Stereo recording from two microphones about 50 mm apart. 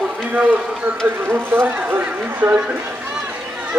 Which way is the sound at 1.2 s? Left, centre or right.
Right.